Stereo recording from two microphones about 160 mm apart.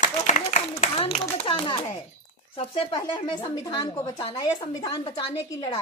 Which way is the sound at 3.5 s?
25° left (ahead or behind).